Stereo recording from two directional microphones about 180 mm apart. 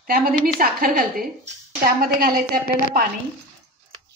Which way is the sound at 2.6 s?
50° left (ahead or behind).